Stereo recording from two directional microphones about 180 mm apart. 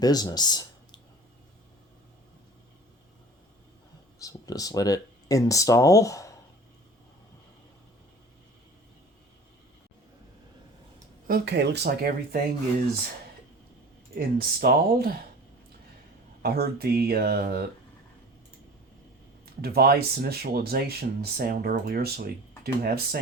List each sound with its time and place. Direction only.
0.0 s speech: 20° left (ahead or behind)
4.2 s speech: 20° left (ahead or behind)
11.3 s speech: 60° right (ahead or behind)
14.2 s speech: 55° right (ahead or behind)
16.4 s speech: 60° right (ahead or behind)
19.6 s speech: 60° right (ahead or behind)